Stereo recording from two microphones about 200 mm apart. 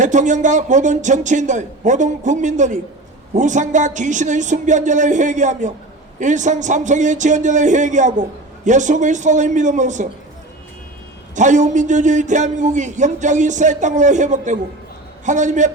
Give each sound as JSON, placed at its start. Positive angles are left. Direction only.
{"t": 0.0, "sound": "a man's voice", "side_deg": -40}
{"t": 11.3, "sound": "a man's voice", "side_deg": -35}